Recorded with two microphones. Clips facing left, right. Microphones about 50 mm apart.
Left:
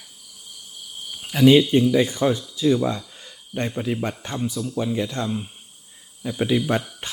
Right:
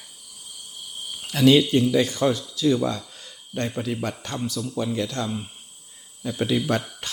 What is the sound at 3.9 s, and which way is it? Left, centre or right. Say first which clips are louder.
Speech: left 2 dB; centre.